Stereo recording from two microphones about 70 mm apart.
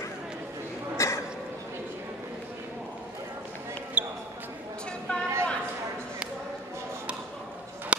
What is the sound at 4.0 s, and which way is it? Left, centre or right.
Basketball bounce, right.